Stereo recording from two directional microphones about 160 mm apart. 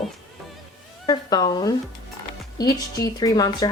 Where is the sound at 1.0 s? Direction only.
25° left (ahead or behind).